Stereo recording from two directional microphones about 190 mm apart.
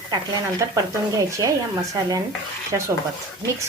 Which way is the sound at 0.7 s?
15° right (ahead or behind).